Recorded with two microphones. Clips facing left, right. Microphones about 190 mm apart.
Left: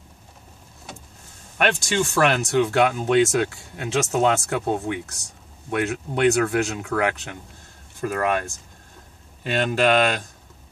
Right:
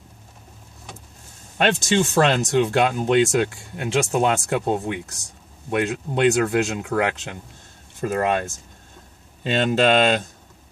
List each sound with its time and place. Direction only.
1.6 s speech: 20° right (ahead or behind)